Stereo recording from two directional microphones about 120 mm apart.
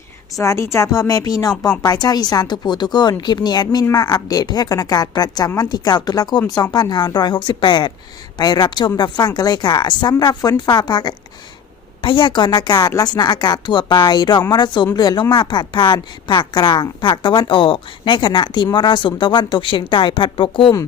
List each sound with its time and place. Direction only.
0.3 s speech: 25° left (ahead or behind); by 20.7 s 45° left (ahead or behind)